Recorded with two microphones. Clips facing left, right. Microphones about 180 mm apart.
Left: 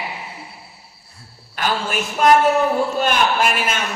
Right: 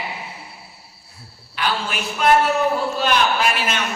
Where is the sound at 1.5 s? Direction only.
45° left (ahead or behind).